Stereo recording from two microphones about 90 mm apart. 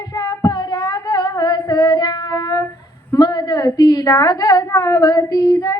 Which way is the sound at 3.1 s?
50° left (ahead or behind).